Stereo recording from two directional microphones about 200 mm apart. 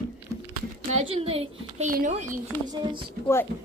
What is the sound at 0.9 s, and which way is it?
A woman's voice, 30° right (ahead or behind).